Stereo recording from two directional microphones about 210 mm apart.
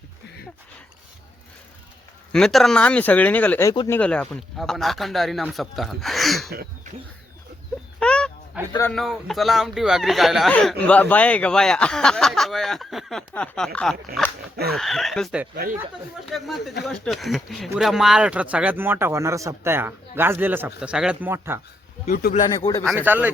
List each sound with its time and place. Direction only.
2.3 s speech: centre (ahead or behind)
7.9 s a sound: 5° left (ahead or behind)
8.5 s speech: 5° right (ahead or behind)
14.5 s a sound: 50° right (ahead or behind)
14.8 s speech: centre (ahead or behind)
22.0 s speech: 40° left (ahead or behind)
22.4 s speech: 20° left (ahead or behind)
22.8 s speech: 5° right (ahead or behind)